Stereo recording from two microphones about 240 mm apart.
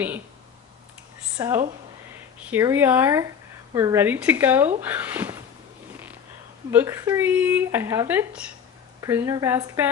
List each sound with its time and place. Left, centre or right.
1.4 s speech: centre
6.7 s speech: centre